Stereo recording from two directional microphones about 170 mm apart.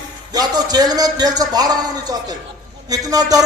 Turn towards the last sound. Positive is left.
turn(degrees=-20)  # may be behind; listen again after turning